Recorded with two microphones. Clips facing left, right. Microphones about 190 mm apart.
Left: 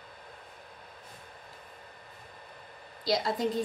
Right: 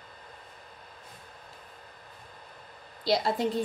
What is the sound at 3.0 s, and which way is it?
Speech, 30° right (ahead or behind).